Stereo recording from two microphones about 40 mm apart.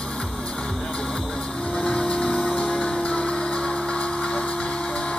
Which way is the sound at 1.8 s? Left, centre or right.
Left.